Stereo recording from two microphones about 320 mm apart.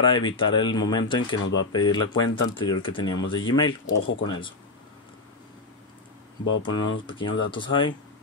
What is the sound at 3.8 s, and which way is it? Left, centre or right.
Speech, left.